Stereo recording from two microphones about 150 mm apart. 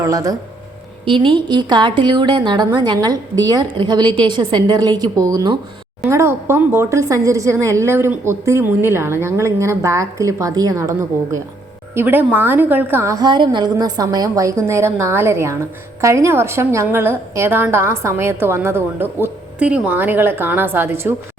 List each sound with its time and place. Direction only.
0.0 s a woman's voice: 20° right (ahead or behind)
1.0 s a woman's voice: 35° right (ahead or behind); by 21.2 s 15° right (ahead or behind)